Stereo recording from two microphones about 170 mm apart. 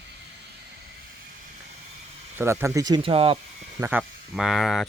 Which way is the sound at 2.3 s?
15° right (ahead or behind).